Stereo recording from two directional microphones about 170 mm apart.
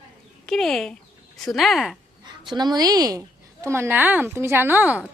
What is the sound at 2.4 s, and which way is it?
Speech, 25° right (ahead or behind).